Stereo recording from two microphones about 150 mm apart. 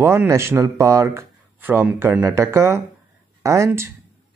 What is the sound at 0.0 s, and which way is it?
Speech, 15° right (ahead or behind).